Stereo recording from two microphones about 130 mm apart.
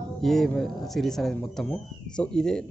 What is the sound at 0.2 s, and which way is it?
Speech, centre (ahead or behind).